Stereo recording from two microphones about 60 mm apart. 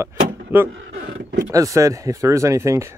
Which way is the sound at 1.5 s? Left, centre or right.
Right.